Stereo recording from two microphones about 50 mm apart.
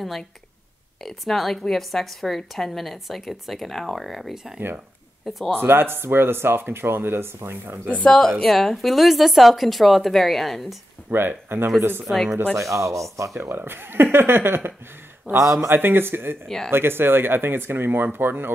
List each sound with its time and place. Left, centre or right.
1.0 s a woman's voice: centre
5.6 s speech: right
8.1 s a woman's voice: centre
11.1 s speech: right
12.1 s speech: right
12.5 s speech: right
13.5 s speech: right
15.7 s speech: right
16.4 s speech: centre
16.7 s speech: right